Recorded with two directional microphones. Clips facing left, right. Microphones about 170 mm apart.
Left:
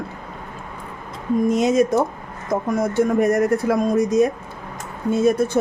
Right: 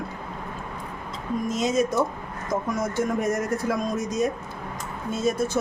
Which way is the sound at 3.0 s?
60° left (ahead or behind).